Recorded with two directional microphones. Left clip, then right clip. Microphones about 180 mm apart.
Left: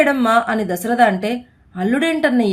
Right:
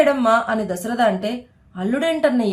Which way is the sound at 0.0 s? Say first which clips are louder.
Left 1 dB; 25° left (ahead or behind).